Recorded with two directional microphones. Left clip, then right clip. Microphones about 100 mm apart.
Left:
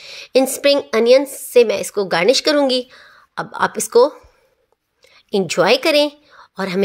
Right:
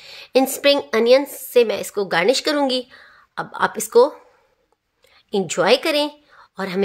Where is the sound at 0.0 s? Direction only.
30° left (ahead or behind).